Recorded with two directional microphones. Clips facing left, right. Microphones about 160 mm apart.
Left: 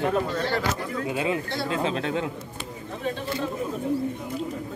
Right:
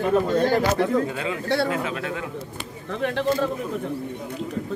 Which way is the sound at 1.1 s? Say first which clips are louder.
Right 2 dB; 20° left (ahead or behind).